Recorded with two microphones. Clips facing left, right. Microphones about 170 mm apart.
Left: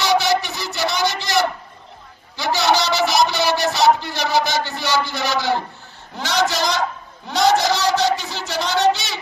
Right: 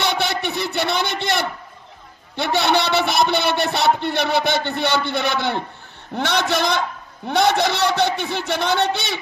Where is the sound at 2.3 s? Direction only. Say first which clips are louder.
Even; 60° right (ahead or behind).